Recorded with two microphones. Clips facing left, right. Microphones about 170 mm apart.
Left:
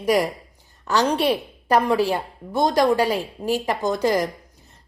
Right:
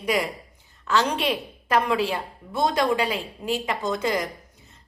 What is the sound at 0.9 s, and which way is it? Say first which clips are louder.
A woman's voice: left 4 dB; 35° left (ahead or behind).